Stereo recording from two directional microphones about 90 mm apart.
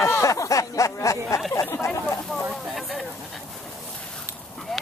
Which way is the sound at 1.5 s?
35° left (ahead or behind).